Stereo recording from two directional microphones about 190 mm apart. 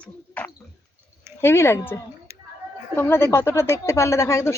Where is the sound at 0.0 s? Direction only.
10° left (ahead or behind).